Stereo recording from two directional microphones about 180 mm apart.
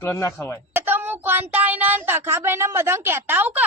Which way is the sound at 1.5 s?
10° right (ahead or behind).